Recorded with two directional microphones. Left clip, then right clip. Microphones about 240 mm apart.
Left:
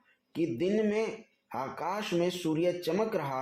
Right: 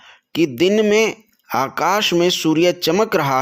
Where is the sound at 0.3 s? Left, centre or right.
Right.